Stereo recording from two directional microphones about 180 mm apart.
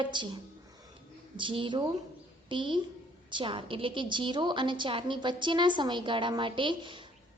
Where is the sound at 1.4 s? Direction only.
25° right (ahead or behind).